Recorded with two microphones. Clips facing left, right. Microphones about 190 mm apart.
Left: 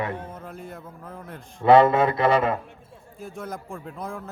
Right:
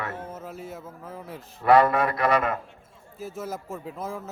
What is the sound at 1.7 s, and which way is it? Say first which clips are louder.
Speech: left 3 dB; 25° left (ahead or behind).